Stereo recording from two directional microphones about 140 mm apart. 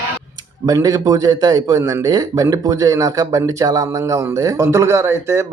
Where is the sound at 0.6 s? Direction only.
25° right (ahead or behind).